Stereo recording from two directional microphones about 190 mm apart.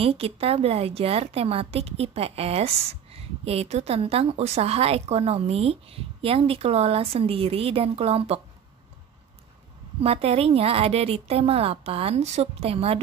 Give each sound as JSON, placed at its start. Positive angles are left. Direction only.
{"t": 0.0, "sound": "a woman's voice", "side_deg": -30}
{"t": 10.0, "sound": "a woman's voice", "side_deg": -30}